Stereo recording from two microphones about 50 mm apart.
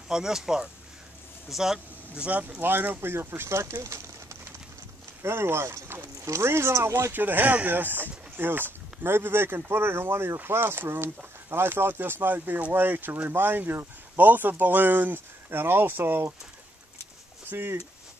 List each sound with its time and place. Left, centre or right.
0.1 s speech: centre
2.1 s speech: right
2.6 s speech: right
5.2 s speech: right
7.2 s speech: right
17.5 s speech: right